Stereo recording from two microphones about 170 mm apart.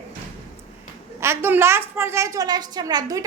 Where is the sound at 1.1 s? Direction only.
15° right (ahead or behind).